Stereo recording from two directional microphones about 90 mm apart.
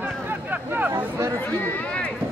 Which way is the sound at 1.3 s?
20° left (ahead or behind).